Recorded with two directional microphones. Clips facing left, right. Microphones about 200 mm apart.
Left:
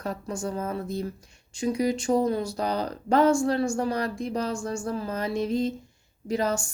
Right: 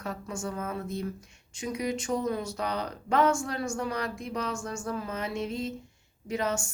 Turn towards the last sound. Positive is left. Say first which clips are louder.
# left 4 dB
turn(degrees=35)  # may be behind; listen again after turning